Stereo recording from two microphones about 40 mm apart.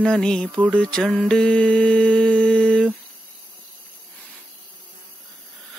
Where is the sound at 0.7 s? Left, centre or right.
Left.